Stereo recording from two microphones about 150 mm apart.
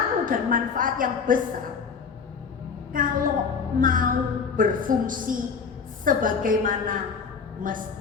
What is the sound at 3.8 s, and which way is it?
A woman's voice, 65° right (ahead or behind).